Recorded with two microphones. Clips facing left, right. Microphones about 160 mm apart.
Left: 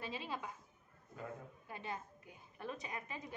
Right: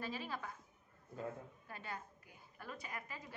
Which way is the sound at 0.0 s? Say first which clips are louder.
Even; 20° left (ahead or behind).